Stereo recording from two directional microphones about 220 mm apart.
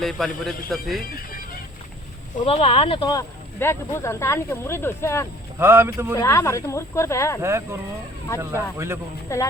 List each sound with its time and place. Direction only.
0.0 s a man's voice: centre (ahead or behind)
1.1 s music: 40° left (ahead or behind)
2.4 s speech: 25° left (ahead or behind)
5.5 s speech: 10° right (ahead or behind)
6.1 s speech: 10° left (ahead or behind)
7.4 s speech: 10° right (ahead or behind)
9.3 s speech: 15° left (ahead or behind)